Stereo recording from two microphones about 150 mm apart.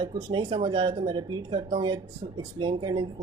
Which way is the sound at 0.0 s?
30° right (ahead or behind).